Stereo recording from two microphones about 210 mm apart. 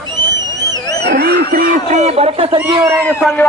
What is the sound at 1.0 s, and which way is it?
Speech, 50° right (ahead or behind).